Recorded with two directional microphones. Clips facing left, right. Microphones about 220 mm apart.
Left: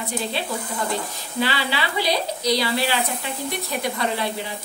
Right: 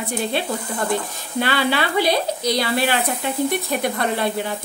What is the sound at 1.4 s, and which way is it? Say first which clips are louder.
A woman's voice: right 4 dB; 55° right (ahead or behind).